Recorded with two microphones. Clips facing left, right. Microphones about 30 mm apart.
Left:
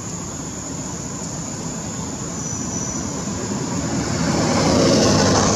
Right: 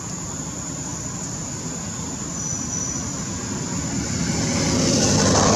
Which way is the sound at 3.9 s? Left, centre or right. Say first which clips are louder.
Left 5 dB; left.